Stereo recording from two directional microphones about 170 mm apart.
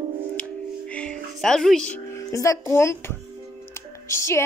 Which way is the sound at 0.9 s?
5° left (ahead or behind).